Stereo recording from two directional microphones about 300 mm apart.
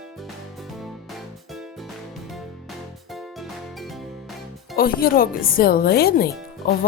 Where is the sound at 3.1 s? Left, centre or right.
Centre.